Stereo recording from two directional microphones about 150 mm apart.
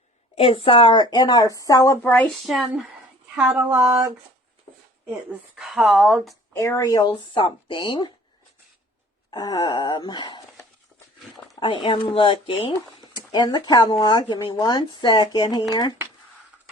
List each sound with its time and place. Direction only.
0.3 s speech: 40° left (ahead or behind); by 2.0 s 20° left (ahead or behind)
2.0 s speech: 10° left (ahead or behind)
3.3 s a sound: 10° right (ahead or behind)
5.3 s speech: 5° right (ahead or behind)
6.5 s speech: 20° left (ahead or behind)
9.3 s speech: 25° left (ahead or behind)
11.6 s speech: 35° left (ahead or behind)